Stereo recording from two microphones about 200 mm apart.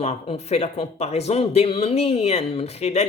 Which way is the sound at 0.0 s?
35° left (ahead or behind).